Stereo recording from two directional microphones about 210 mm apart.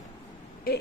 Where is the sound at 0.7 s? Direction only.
45° left (ahead or behind).